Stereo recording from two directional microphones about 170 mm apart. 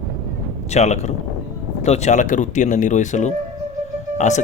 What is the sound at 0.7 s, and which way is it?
Speech, 40° left (ahead or behind).